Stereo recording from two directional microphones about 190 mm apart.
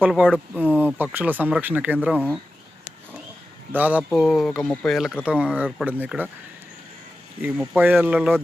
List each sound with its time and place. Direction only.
0.0 s speech: 5° right (ahead or behind)
3.7 s speech: 10° right (ahead or behind)
7.4 s speech: 5° right (ahead or behind)